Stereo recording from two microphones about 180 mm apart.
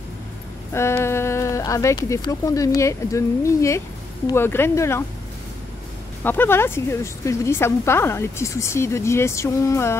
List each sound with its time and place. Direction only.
0.7 s a woman's voice: 15° left (ahead or behind)
6.2 s a woman's voice: 10° left (ahead or behind)